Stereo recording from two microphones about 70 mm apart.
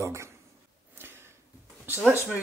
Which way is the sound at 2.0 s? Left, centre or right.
Right.